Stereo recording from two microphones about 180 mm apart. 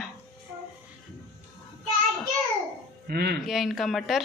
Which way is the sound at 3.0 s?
65° right (ahead or behind).